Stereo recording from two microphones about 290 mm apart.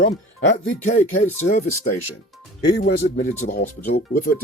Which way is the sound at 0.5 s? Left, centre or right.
Left.